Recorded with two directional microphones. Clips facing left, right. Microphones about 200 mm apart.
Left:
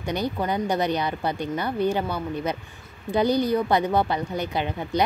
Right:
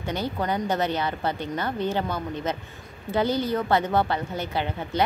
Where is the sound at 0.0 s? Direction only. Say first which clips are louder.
Left 2 dB; 15° left (ahead or behind).